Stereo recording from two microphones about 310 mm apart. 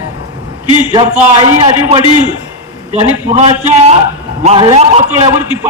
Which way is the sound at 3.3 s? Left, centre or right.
Right.